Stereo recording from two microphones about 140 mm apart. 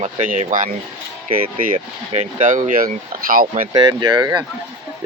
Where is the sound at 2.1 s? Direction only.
50° right (ahead or behind); by 3.6 s 90° right.